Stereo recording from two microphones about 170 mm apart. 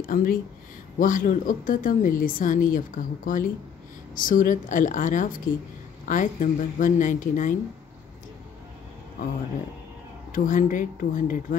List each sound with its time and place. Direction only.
0.0 s speech: 55° left (ahead or behind)
10.3 s speech: 50° left (ahead or behind)